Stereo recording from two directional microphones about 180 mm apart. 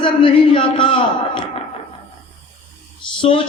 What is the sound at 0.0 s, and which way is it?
A man's voice, 25° left (ahead or behind).